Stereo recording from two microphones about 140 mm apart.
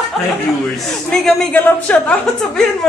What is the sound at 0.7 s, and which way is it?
A woman's voice, centre (ahead or behind).